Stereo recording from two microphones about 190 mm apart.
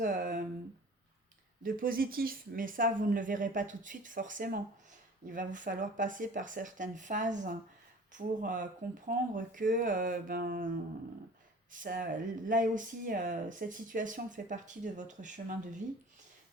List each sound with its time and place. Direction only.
0.0 s speech: 45° right (ahead or behind)
1.6 s speech: 45° right (ahead or behind)
11.7 s speech: 45° right (ahead or behind)